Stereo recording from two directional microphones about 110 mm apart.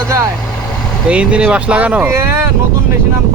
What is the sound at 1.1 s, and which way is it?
Speech, 10° right (ahead or behind).